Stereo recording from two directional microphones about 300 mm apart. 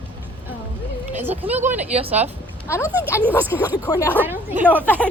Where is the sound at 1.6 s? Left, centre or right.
Right.